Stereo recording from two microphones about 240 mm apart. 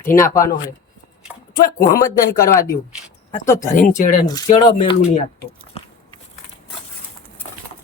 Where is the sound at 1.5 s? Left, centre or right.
Left.